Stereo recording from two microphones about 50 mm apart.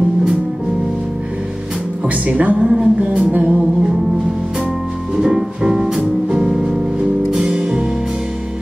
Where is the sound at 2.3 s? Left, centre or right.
Right.